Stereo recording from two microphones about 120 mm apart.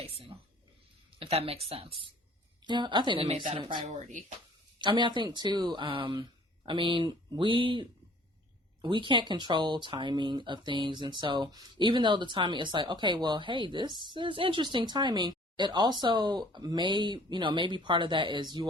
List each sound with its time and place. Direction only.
0.0 s speech: 55° right (ahead or behind)
3.8 s speech: 80° right
4.8 s speech: 40° right (ahead or behind)